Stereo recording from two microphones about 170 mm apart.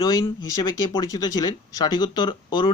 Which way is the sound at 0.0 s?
25° left (ahead or behind).